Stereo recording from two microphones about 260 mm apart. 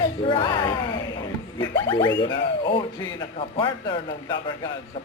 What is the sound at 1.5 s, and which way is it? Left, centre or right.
Speech, centre.